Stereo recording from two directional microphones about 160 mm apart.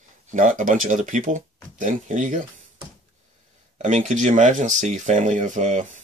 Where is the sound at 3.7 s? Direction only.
45° right (ahead or behind).